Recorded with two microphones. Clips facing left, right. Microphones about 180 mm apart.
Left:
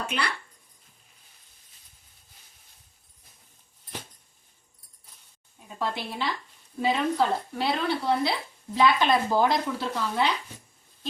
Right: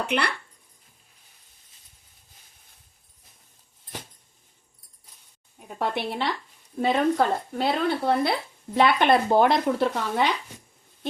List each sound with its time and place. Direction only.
0.1 s speech: 65° right (ahead or behind)
5.5 s speech: 65° right (ahead or behind)
6.8 s speech: 50° right (ahead or behind)